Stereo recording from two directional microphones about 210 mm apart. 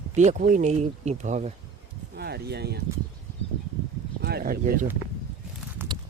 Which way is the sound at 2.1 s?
50° right (ahead or behind).